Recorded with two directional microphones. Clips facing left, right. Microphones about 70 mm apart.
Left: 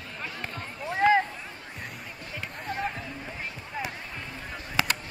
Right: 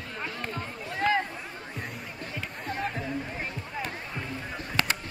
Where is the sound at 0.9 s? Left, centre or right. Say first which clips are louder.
Left 5 dB; left.